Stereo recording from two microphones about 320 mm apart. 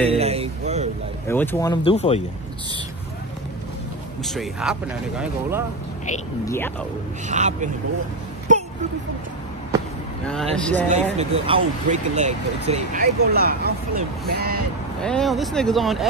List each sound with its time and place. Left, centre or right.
0.1 s a sound: centre
1.2 s speech: centre
4.2 s speech: centre
7.2 s speech: right
8.5 s a sound: right
10.5 s speech: centre
10.9 s speech: centre
15.0 s speech: centre